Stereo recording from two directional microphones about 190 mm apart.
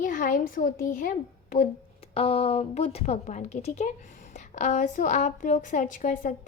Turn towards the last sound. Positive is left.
turn(degrees=40)  # may be behind; listen again after turning